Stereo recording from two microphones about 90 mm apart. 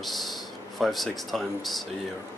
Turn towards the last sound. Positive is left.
turn(degrees=0)  # may be behind; listen again after turning